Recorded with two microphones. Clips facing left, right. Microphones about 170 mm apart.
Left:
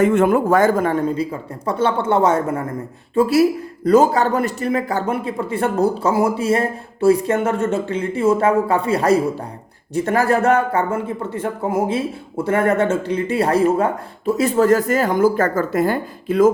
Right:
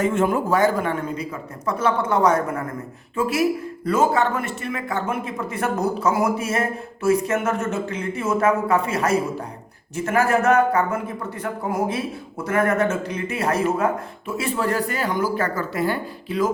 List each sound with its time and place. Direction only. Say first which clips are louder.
0.0 s speech: left 6 dB; 60° left (ahead or behind)